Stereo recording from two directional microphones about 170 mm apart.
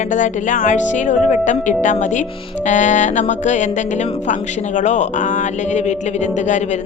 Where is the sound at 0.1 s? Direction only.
50° left (ahead or behind).